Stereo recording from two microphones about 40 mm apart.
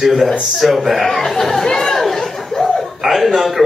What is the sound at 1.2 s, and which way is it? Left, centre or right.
Speech, centre.